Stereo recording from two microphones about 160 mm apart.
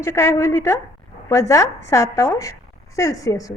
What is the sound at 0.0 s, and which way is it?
A woman's voice, 15° left (ahead or behind).